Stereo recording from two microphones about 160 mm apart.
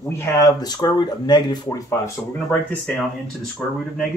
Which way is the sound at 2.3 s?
5° left (ahead or behind).